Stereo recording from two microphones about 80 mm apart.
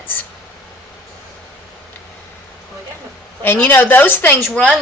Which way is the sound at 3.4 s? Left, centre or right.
Left.